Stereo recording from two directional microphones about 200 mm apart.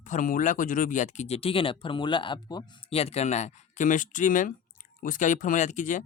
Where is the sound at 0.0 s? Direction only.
40° left (ahead or behind).